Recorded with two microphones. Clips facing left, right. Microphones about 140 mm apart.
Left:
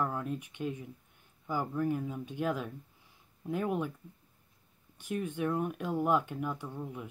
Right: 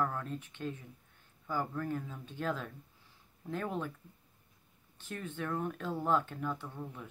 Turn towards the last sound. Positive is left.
turn(degrees=15)  # may be behind; listen again after turning